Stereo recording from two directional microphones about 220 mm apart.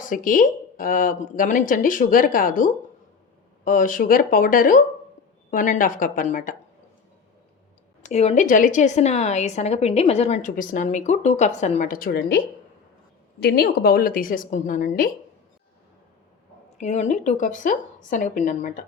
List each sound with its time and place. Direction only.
0.1 s a woman's voice: 35° left (ahead or behind)
8.1 s a woman's voice: 30° left (ahead or behind)
13.4 s a woman's voice: 45° left (ahead or behind)
16.8 s a woman's voice: 30° left (ahead or behind)